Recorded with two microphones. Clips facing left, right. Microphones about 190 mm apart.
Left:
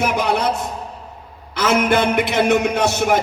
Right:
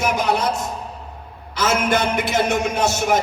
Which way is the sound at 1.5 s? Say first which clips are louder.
Left 3 dB; 60° left (ahead or behind).